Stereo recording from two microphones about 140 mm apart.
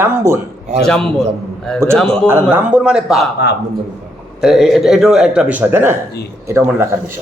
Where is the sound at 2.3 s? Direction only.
15° right (ahead or behind).